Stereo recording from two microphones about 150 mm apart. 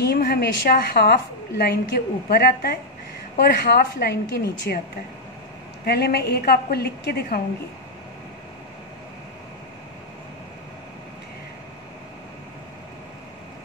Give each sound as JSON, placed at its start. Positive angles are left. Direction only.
{"t": 0.0, "sound": "a woman's voice", "side_deg": 90}
{"t": 5.9, "sound": "a woman's voice", "side_deg": 90}